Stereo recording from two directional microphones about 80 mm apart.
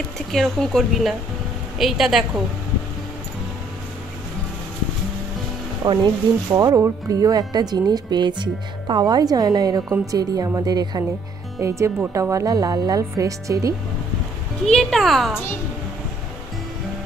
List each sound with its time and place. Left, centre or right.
0.3 s speech: centre
5.8 s speech: right
6.5 s speech: right
11.6 s speech: right
14.7 s speech: centre